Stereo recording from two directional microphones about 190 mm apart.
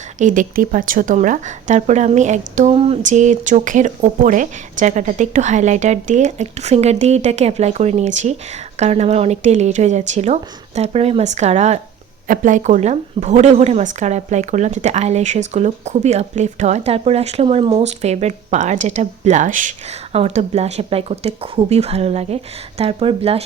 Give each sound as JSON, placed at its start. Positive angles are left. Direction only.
{"t": 0.2, "sound": "speech", "side_deg": -45}